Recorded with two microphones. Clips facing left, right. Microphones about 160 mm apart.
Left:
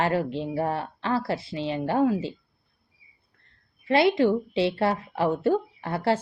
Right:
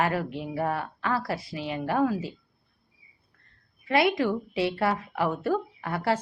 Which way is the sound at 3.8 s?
25° left (ahead or behind).